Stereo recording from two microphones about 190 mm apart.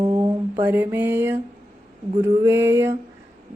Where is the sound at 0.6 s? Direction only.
10° right (ahead or behind).